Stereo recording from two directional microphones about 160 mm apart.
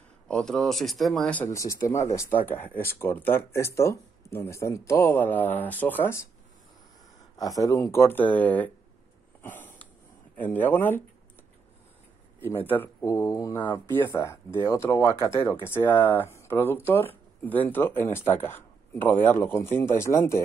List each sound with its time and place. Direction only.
0.3 s speech: 5° left (ahead or behind)
7.3 s speech: 20° left (ahead or behind)
9.4 s a sound: 10° left (ahead or behind)
10.3 s speech: 10° left (ahead or behind)
12.4 s speech: 15° left (ahead or behind)
13.8 s speech: 15° left (ahead or behind)